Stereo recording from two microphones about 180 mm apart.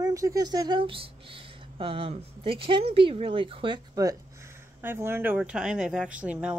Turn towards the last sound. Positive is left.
turn(degrees=-5)  # may be behind; listen again after turning